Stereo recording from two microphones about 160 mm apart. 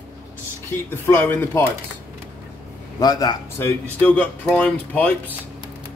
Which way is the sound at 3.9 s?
10° left (ahead or behind).